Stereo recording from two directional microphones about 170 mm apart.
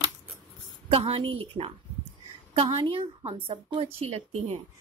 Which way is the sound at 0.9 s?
35° right (ahead or behind).